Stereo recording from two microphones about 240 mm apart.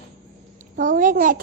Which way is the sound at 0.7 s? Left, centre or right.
Right.